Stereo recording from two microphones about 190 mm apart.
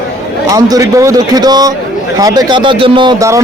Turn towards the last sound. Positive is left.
turn(degrees=-15)  # may be behind; listen again after turning